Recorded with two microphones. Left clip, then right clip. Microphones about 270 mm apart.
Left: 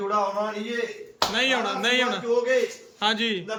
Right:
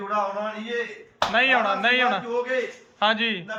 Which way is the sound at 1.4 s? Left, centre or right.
Centre.